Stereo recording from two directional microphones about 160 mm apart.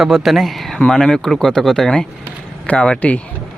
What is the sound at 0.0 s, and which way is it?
Speech, centre (ahead or behind).